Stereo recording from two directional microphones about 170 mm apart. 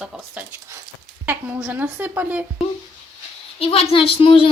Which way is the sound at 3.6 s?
35° left (ahead or behind).